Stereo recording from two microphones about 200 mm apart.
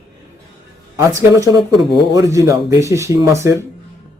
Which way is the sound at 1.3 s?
20° right (ahead or behind).